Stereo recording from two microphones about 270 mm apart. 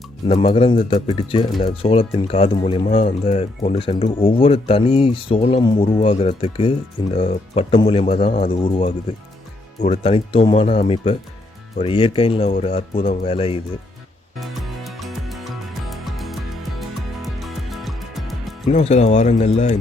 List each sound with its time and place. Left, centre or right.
0.3 s speech: left
14.8 s music: centre
18.7 s speech: left